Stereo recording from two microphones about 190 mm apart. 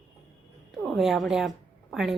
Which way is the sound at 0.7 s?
Centre (ahead or behind).